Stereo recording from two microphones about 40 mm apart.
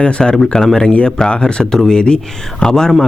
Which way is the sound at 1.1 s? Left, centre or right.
Left.